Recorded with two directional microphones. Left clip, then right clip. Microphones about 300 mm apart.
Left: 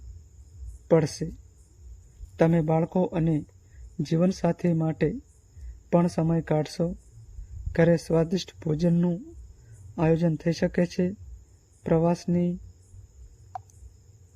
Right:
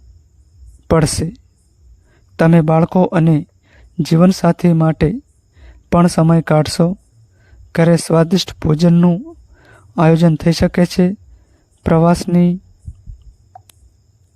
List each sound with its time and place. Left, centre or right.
0.9 s speech: right
2.3 s speech: right